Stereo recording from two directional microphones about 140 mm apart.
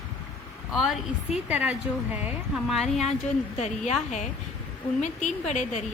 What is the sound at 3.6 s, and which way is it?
A woman's voice, 55° left (ahead or behind).